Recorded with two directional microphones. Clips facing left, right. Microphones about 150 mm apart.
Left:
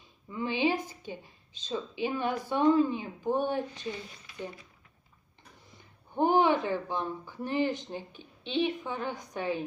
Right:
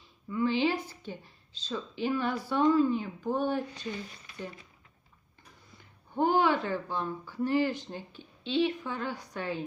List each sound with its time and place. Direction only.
0.3 s speech: 20° left (ahead or behind)
6.1 s speech: 20° left (ahead or behind)